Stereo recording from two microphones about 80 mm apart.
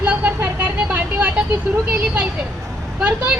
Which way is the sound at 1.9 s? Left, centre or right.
Centre.